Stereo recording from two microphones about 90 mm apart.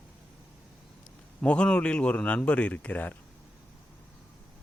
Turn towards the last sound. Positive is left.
turn(degrees=15)  # may be behind; listen again after turning